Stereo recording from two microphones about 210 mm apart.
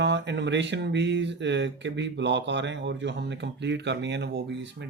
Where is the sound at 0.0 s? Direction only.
55° right (ahead or behind).